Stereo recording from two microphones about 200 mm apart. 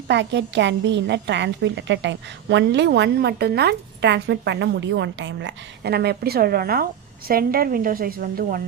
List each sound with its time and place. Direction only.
0.1 s a woman's voice: 60° right (ahead or behind)